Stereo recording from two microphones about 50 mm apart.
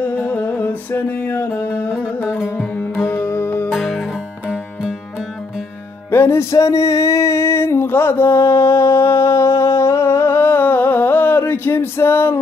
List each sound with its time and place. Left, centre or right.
0.0 s music: left
3.0 s music: left
3.7 s music: centre
6.1 s a sound: left